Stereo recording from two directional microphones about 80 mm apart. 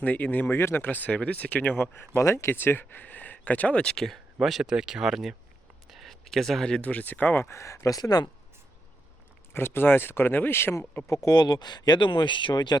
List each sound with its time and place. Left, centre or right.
0.0 s speech: left
7.4 s speech: left
9.5 s speech: left
11.3 s speech: left